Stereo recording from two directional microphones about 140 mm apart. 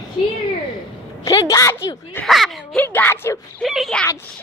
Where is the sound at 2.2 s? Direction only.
Centre (ahead or behind).